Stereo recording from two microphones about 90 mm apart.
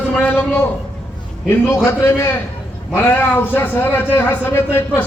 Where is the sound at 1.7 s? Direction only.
25° left (ahead or behind).